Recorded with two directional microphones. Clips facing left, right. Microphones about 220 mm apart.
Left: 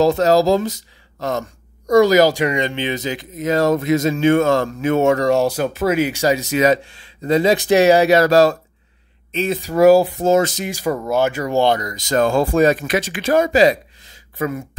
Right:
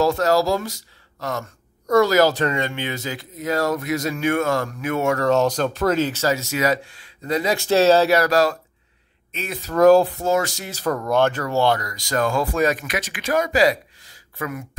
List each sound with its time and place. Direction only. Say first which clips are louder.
0.0 s speech: left 4 dB; 20° left (ahead or behind)
9.6 s speech: left 2 dB; 10° left (ahead or behind)
10.2 s speech: left 6 dB; 20° left (ahead or behind)